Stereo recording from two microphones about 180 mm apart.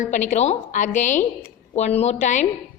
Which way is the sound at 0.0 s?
45° left (ahead or behind).